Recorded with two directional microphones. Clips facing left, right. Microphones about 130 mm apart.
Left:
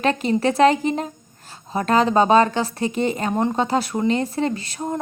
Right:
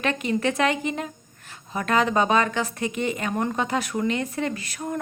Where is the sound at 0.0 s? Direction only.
35° left (ahead or behind).